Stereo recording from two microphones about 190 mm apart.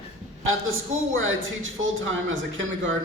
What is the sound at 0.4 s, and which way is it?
A man's voice, 90° right.